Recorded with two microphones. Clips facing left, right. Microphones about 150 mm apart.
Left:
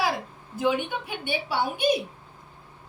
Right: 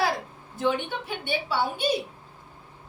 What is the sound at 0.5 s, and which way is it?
A woman's voice, 10° left (ahead or behind).